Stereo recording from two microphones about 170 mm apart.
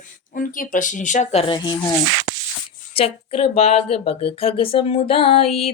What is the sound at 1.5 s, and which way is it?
Speech, 25° left (ahead or behind).